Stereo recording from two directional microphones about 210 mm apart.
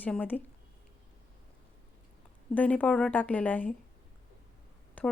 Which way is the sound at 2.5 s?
5° left (ahead or behind).